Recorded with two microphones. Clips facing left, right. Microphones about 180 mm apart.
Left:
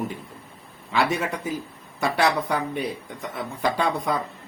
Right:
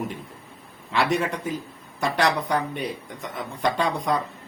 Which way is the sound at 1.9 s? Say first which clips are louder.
Left 1 dB; 5° left (ahead or behind).